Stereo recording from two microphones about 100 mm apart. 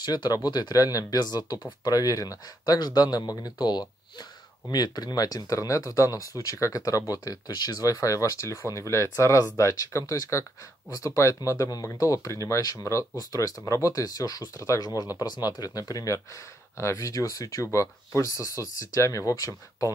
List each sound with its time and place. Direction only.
0.0 s speech: 45° left (ahead or behind)